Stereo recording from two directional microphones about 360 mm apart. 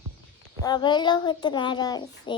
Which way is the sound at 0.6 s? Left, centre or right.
Centre.